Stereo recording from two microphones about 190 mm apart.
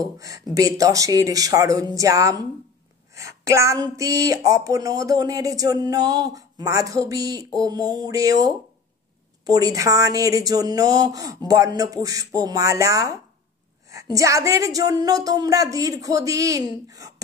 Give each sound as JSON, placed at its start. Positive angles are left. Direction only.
{"t": 0.2, "sound": "speech", "side_deg": -15}
{"t": 9.5, "sound": "speech", "side_deg": -20}